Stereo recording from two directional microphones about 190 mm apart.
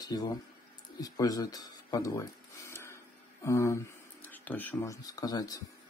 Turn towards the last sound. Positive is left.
turn(degrees=20)  # may be behind; listen again after turning